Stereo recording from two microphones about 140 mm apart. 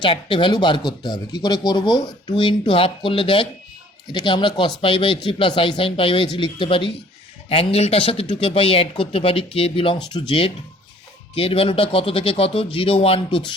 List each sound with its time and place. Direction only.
0.0 s speech: 35° left (ahead or behind)